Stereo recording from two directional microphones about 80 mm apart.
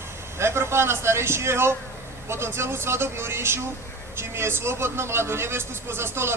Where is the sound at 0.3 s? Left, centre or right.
Right.